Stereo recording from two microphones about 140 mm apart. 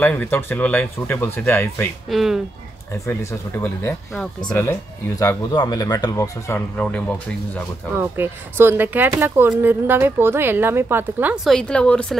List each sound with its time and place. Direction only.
0.0 s speech: 15° left (ahead or behind)
2.0 s speech: centre (ahead or behind)
3.1 s speech: 20° left (ahead or behind)
4.1 s speech: 5° left (ahead or behind)
5.2 s speech: 25° left (ahead or behind)
8.0 s a woman's voice: 15° right (ahead or behind)
11.3 s speech: centre (ahead or behind)